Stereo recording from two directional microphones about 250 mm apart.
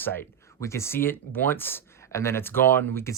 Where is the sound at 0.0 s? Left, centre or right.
Centre.